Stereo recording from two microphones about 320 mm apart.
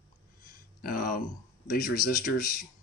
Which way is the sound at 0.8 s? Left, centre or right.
Left.